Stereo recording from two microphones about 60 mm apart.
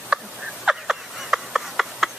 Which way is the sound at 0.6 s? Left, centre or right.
Centre.